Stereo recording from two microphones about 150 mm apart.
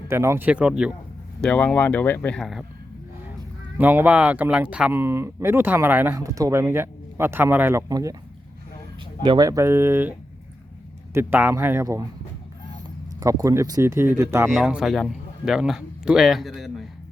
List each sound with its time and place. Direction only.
0.1 s speech: 15° right (ahead or behind)
1.4 s speech: 10° left (ahead or behind)
2.4 s speech: centre (ahead or behind)
3.8 s speech: 15° right (ahead or behind)
9.2 s speech: 30° right (ahead or behind)
13.1 s speech: 20° right (ahead or behind)
14.5 s a man's voice: centre (ahead or behind)